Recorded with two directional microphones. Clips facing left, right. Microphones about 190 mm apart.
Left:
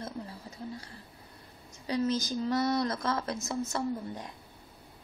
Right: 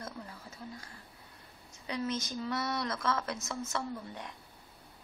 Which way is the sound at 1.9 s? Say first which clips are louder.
Left 6 dB; 35° left (ahead or behind).